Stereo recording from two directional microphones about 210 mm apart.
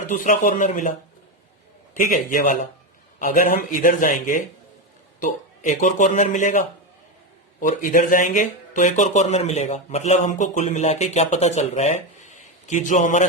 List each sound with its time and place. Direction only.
0.1 s speech: 40° left (ahead or behind)
2.0 s speech: 40° left (ahead or behind)